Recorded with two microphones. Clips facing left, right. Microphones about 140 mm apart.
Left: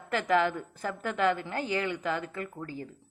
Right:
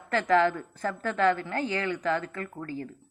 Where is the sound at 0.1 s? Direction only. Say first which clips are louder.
Right 3 dB; 15° left (ahead or behind).